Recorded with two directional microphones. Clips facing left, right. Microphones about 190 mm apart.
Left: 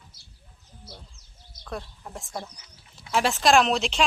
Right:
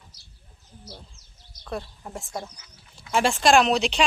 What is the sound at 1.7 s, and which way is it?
Speech, centre (ahead or behind).